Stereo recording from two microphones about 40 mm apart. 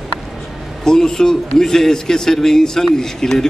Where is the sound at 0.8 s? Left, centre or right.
Centre.